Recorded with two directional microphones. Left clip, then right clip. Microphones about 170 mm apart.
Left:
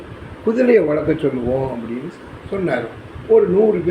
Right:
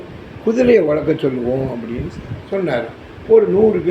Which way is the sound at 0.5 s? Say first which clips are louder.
Right 1 dB; 15° right (ahead or behind).